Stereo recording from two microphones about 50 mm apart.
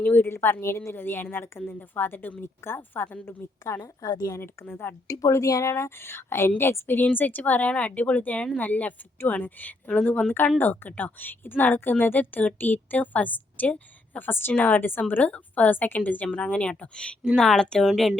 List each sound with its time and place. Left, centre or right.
0.0 s a woman's voice: left
3.7 s a woman's voice: left
4.4 s a woman's voice: left
5.0 s a woman's voice: left
7.0 s a woman's voice: left
17.3 s speech: centre
17.8 s speech: centre